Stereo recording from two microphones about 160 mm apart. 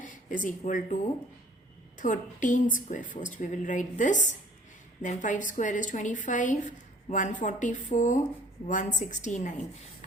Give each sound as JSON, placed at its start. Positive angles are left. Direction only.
{"t": 0.0, "sound": "speech", "side_deg": 55}
{"t": 2.0, "sound": "speech", "side_deg": 50}